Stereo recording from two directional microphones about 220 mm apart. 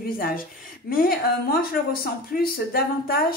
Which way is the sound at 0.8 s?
40° left (ahead or behind).